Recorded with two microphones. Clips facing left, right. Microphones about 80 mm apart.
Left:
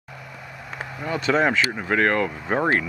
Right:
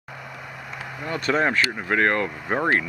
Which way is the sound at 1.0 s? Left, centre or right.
Centre.